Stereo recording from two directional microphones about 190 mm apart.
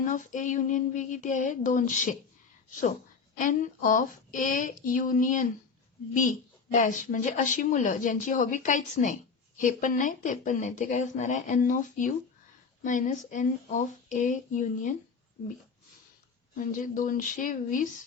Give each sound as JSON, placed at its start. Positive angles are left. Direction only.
{"t": 0.0, "sound": "a woman's voice", "side_deg": 40}
{"t": 3.3, "sound": "a woman's voice", "side_deg": 45}
{"t": 6.7, "sound": "a woman's voice", "side_deg": 40}
{"t": 16.6, "sound": "a woman's voice", "side_deg": 45}